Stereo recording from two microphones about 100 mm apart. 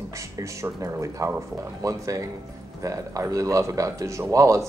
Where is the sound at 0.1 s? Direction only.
30° right (ahead or behind).